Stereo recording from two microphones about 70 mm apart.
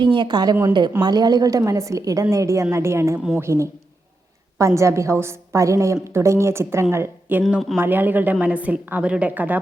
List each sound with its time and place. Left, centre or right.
0.0 s a woman's voice: right